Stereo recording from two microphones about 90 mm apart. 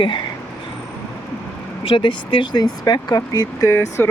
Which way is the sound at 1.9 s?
70° left (ahead or behind).